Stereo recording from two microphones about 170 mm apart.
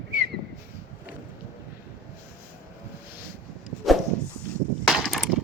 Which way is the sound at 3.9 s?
Centre (ahead or behind).